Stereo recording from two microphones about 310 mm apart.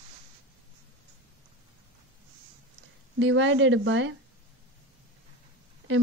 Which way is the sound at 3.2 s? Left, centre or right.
Right.